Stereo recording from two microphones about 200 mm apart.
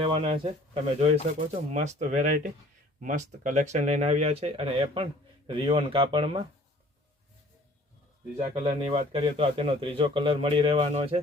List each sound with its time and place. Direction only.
0.0 s a man's voice: 30° right (ahead or behind)
8.6 s a man's voice: 30° right (ahead or behind)